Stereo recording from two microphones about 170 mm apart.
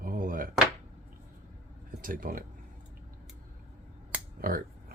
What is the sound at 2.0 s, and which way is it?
Speech, 55° right (ahead or behind).